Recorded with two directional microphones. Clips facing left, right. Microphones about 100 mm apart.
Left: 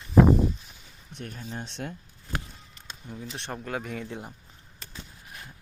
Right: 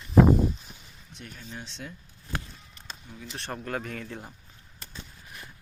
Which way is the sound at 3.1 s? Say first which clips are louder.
Left 2 dB; 20° left (ahead or behind).